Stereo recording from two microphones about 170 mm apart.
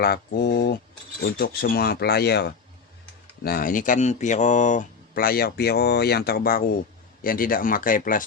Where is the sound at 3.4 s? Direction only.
60° left (ahead or behind).